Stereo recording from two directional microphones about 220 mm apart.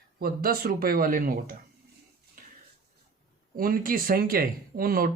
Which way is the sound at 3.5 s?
40° right (ahead or behind).